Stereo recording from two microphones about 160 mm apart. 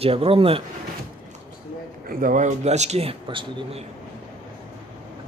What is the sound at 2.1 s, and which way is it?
A man's voice, 60° right (ahead or behind).